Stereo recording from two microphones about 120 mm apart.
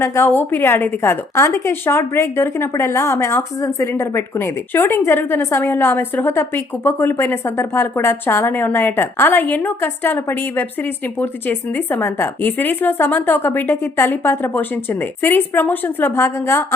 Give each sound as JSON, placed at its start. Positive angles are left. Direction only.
{"t": 0.0, "sound": "a woman's voice", "side_deg": 20}